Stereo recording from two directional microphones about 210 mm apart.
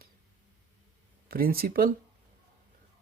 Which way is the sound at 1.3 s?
45° right (ahead or behind).